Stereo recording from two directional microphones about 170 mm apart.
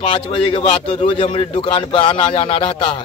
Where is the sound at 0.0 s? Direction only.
30° left (ahead or behind).